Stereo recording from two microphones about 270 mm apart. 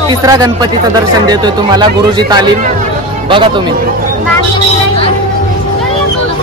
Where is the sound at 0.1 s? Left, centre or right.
Centre.